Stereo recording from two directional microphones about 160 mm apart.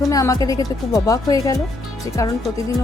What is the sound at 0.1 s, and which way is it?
Speech, 20° left (ahead or behind).